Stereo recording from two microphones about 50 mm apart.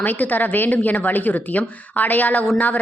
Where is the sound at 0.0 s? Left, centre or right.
Left.